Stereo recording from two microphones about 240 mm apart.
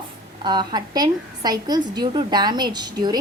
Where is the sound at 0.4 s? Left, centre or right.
Centre.